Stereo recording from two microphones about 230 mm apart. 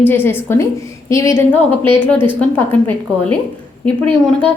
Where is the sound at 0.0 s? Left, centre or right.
Centre.